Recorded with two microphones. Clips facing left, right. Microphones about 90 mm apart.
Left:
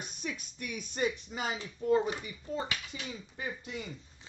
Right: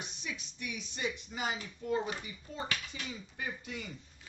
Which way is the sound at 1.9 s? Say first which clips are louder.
Left 6 dB; 35° left (ahead or behind).